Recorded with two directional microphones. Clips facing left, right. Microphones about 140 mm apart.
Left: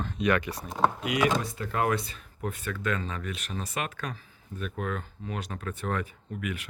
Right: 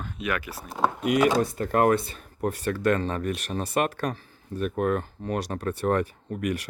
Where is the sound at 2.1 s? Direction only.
40° right (ahead or behind).